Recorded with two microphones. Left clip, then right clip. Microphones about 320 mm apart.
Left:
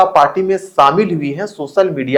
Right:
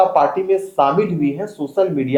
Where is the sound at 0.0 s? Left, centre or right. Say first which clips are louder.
Left 4 dB; left.